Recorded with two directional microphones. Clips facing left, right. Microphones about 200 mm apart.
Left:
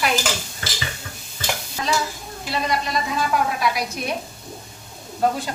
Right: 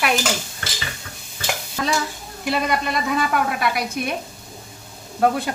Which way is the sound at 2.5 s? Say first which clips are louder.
Right 3 dB; 60° right (ahead or behind).